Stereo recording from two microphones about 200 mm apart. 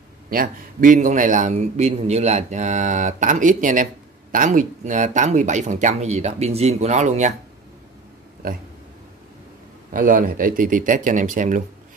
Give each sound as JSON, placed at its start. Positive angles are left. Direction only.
{"t": 0.3, "sound": "a man's voice", "side_deg": -45}
{"t": 8.4, "sound": "speech", "side_deg": -45}
{"t": 9.8, "sound": "speech", "side_deg": -45}